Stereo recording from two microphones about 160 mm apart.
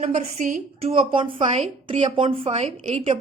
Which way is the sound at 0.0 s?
45° right (ahead or behind).